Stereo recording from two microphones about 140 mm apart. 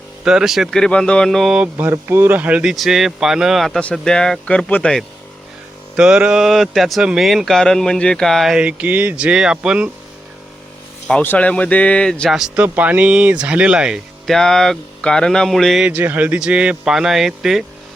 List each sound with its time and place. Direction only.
0.3 s speech: 5° right (ahead or behind)
1.7 s speech: 20° right (ahead or behind); by 5.0 s 5° left (ahead or behind)
6.0 s speech: 5° right (ahead or behind)
11.1 s speech: 10° left (ahead or behind)